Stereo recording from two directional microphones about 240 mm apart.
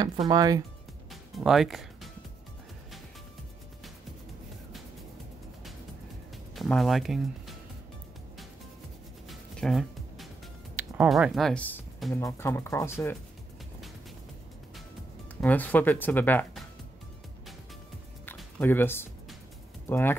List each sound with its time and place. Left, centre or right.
0.3 s speech: centre
1.3 s speech: centre
6.5 s speech: centre
9.3 s music: centre
10.8 s speech: centre
15.4 s speech: centre
18.2 s music: centre
19.9 s speech: centre